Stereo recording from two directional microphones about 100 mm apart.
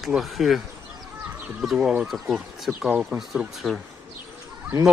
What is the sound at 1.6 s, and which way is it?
Speech, 5° right (ahead or behind).